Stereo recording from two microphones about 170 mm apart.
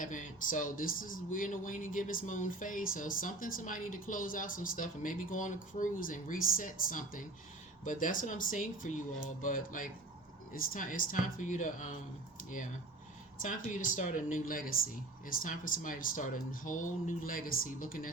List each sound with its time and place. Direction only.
0.0 s speech: 50° left (ahead or behind)
13.4 s speech: 50° left (ahead or behind)